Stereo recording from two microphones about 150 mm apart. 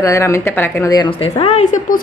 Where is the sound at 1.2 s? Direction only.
40° left (ahead or behind).